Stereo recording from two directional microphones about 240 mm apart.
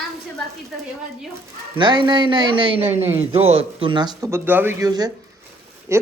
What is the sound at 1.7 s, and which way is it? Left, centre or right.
Speech, centre.